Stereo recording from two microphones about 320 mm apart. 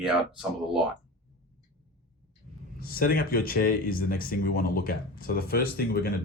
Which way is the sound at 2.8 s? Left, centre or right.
Left.